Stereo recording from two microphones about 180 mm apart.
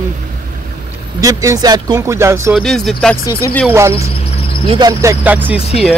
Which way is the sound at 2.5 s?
Centre (ahead or behind).